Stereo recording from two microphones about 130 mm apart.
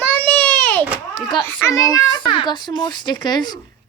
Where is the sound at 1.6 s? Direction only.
25° left (ahead or behind).